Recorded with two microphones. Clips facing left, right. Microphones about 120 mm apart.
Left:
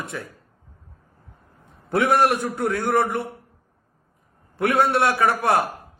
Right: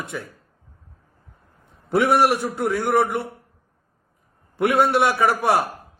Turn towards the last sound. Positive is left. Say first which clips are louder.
# right 1 dB
turn(degrees=0)  # may be behind; listen again after turning